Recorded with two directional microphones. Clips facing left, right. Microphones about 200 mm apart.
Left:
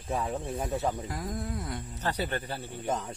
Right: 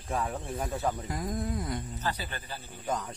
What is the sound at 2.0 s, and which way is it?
Speech, 65° left (ahead or behind).